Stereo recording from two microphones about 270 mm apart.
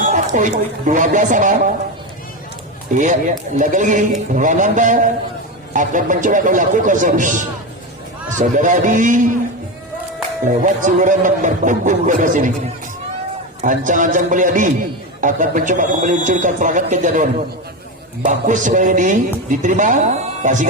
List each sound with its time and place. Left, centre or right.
0.0 s speech: right
3.0 s speech: right
10.6 s speech: right
13.6 s speech: right